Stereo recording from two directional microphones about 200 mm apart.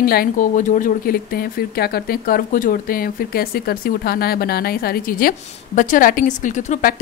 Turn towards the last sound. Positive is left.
turn(degrees=40)  # may be behind; listen again after turning